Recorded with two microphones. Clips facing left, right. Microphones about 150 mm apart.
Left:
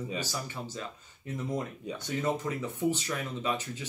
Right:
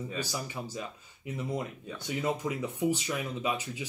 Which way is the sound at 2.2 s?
10° right (ahead or behind).